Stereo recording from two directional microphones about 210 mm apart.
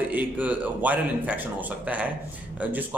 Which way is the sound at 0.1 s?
5° right (ahead or behind).